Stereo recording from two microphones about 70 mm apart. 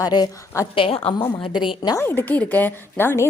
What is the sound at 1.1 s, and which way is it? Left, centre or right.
Speech, left.